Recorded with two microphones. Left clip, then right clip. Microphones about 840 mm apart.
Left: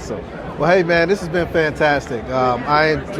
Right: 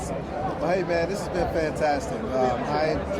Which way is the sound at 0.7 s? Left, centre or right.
Left.